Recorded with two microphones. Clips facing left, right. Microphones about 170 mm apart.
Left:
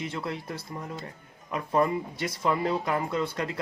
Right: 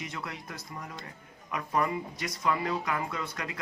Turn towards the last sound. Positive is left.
turn(degrees=30)  # may be behind; listen again after turning